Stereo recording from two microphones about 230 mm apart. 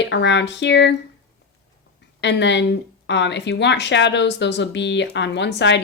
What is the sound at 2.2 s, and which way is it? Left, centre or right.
Speech, left.